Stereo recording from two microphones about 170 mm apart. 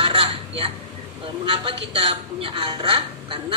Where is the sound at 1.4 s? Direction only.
30° right (ahead or behind).